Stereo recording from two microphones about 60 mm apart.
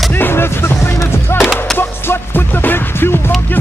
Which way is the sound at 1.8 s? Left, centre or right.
Left.